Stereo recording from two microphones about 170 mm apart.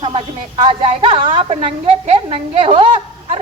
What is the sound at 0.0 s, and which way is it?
A woman's voice, 30° right (ahead or behind).